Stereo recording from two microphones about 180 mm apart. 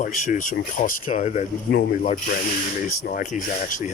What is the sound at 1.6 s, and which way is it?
Speech, 60° left (ahead or behind).